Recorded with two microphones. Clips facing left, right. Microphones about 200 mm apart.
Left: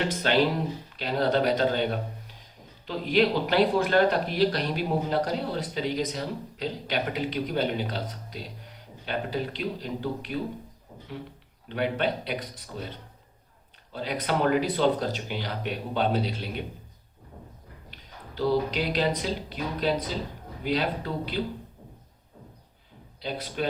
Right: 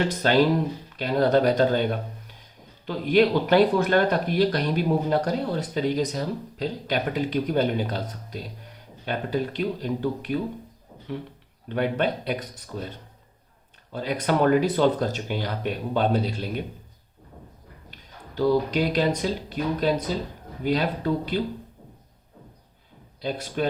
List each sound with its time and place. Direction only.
0.1 s a man's voice: 45° right (ahead or behind)
9.0 s a man's voice: 50° right (ahead or behind)
11.7 s a man's voice: 45° right (ahead or behind)
13.9 s a man's voice: 45° right (ahead or behind)
17.9 s a man's voice: 45° right (ahead or behind)
23.2 s a man's voice: 45° right (ahead or behind)